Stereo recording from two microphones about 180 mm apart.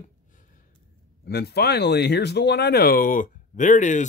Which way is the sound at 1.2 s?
60° left (ahead or behind).